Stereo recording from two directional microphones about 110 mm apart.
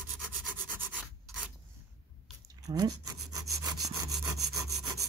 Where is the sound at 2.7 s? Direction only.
35° right (ahead or behind).